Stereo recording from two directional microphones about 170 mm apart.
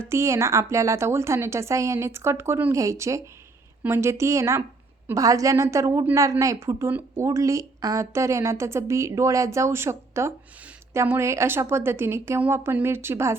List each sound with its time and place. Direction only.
0.0 s a woman's voice: 15° right (ahead or behind)